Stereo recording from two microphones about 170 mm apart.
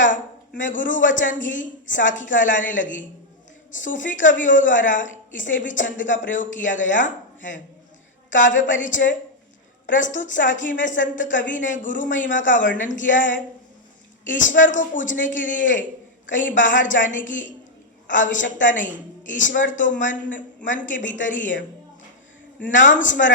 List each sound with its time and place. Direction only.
0.6 s a woman's voice: 50° left (ahead or behind)
22.7 s a woman's voice: 50° left (ahead or behind)